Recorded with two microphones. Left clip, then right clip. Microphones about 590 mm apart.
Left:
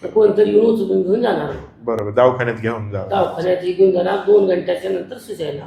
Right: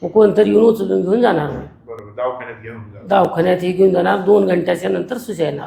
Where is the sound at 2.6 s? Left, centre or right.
Left.